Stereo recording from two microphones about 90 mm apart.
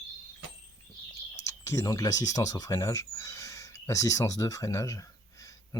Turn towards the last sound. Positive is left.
turn(degrees=35)  # may be behind; listen again after turning